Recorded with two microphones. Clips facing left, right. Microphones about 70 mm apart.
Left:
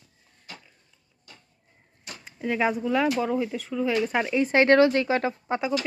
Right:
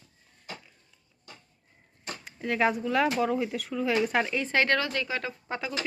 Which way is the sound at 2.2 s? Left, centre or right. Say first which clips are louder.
Left 1 dB; centre.